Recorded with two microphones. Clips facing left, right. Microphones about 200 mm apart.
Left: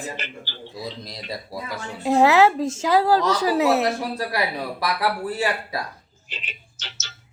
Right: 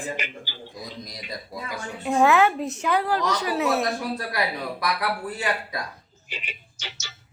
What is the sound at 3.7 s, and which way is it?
A man's voice, 25° left (ahead or behind).